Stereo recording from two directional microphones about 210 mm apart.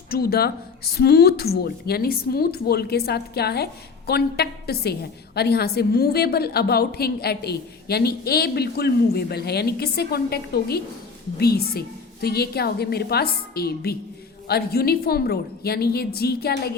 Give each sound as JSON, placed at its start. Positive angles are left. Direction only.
{"t": 0.1, "sound": "a woman's voice", "side_deg": 45}